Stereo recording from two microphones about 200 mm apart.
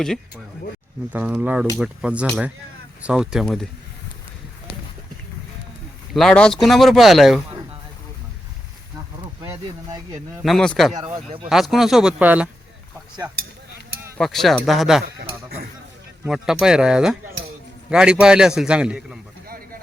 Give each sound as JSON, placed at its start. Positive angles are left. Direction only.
{"t": 1.1, "sound": "a man's voice", "side_deg": -5}
{"t": 6.1, "sound": "a man's voice", "side_deg": 5}
{"t": 9.4, "sound": "speech", "side_deg": -20}
{"t": 10.4, "sound": "a man's voice", "side_deg": 0}
{"t": 10.9, "sound": "speech", "side_deg": -25}
{"t": 11.4, "sound": "a man's voice", "side_deg": 0}
{"t": 16.2, "sound": "a man's voice", "side_deg": 0}